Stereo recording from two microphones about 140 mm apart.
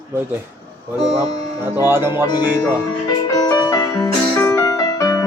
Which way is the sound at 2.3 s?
30° left (ahead or behind).